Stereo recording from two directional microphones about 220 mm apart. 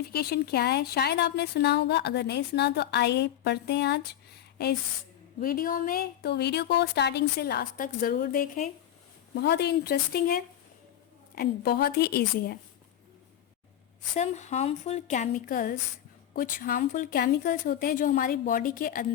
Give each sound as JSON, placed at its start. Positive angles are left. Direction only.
{"t": 0.1, "sound": "speech", "side_deg": 45}
{"t": 9.3, "sound": "speech", "side_deg": 50}
{"t": 14.2, "sound": "speech", "side_deg": 30}